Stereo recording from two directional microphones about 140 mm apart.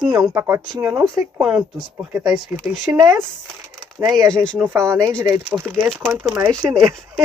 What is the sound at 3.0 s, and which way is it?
Speech, 20° right (ahead or behind).